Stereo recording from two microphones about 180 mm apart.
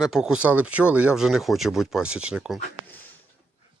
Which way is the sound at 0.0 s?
Centre (ahead or behind).